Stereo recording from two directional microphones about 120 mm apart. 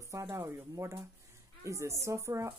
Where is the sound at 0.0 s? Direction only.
25° right (ahead or behind).